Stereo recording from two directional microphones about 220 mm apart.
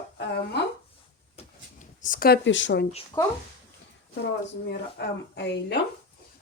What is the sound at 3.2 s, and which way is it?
Speech, 15° left (ahead or behind).